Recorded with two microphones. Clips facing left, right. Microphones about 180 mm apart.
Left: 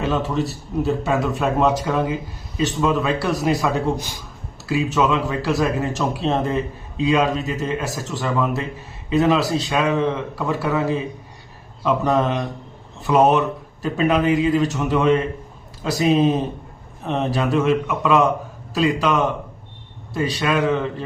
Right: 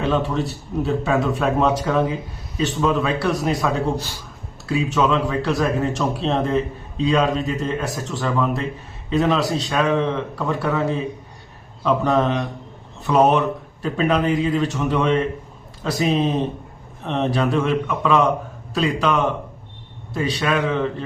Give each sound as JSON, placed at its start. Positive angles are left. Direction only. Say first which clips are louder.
{"t": 0.0, "sound": "a man's voice", "louder": "right 1 dB", "side_deg": 0}
{"t": 3.9, "sound": "a man's voice", "louder": "right 1 dB", "side_deg": 15}
{"t": 4.7, "sound": "a man's voice", "louder": "even", "side_deg": 0}